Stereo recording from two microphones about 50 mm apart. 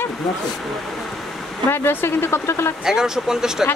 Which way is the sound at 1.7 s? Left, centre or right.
Left.